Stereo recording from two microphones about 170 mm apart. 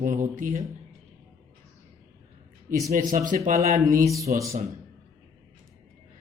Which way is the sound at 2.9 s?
50° right (ahead or behind).